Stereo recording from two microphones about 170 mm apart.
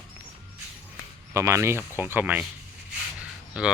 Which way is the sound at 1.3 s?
15° right (ahead or behind).